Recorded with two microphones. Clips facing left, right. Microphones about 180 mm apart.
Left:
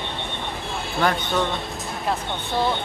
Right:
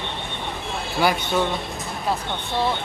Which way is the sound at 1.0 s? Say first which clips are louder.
Right 1 dB; 10° right (ahead or behind).